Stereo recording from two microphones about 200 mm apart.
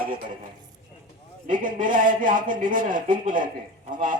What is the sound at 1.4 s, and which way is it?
Speech, 40° right (ahead or behind).